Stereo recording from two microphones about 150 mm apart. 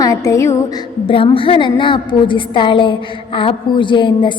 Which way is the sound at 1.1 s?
35° left (ahead or behind).